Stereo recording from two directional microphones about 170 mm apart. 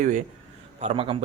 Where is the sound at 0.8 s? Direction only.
35° right (ahead or behind).